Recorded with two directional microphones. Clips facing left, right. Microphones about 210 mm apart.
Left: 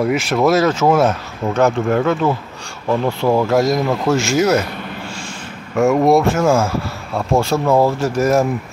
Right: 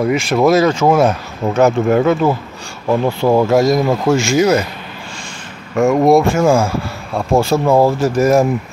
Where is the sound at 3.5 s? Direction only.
Centre (ahead or behind).